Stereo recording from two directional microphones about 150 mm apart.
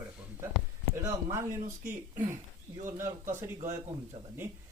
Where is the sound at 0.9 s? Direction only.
20° right (ahead or behind).